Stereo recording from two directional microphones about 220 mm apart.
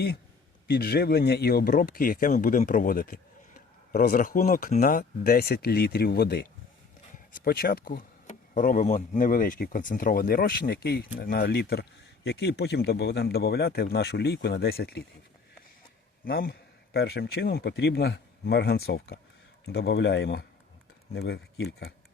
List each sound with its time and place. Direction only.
0.7 s speech: 45° left (ahead or behind)
7.4 s speech: 45° left (ahead or behind)
16.2 s speech: 40° left (ahead or behind)